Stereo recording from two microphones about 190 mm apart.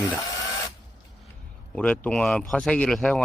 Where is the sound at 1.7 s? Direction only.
5° left (ahead or behind).